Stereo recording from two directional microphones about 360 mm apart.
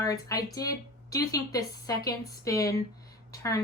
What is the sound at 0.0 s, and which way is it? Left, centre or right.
Speech, centre.